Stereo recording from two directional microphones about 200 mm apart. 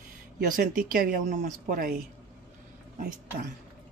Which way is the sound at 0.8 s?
45° right (ahead or behind).